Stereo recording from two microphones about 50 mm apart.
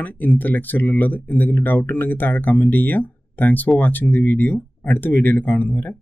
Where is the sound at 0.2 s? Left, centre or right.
Left.